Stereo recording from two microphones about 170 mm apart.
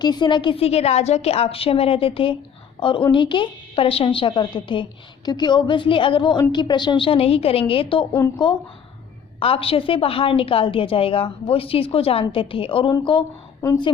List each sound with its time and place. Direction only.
0.0 s a woman's voice: 25° left (ahead or behind)
9.4 s a woman's voice: 35° left (ahead or behind)